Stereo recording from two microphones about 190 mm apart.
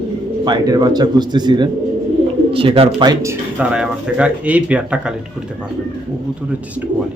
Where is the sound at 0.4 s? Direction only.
20° right (ahead or behind).